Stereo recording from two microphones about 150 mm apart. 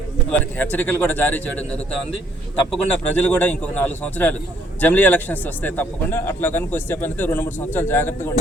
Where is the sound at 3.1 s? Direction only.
10° left (ahead or behind).